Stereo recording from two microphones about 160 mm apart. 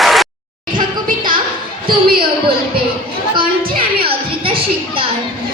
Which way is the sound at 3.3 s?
35° right (ahead or behind).